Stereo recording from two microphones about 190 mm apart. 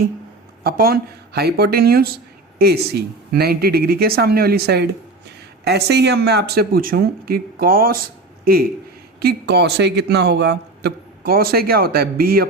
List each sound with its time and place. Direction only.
0.6 s speech: 50° right (ahead or behind)
9.2 s speech: 60° right (ahead or behind)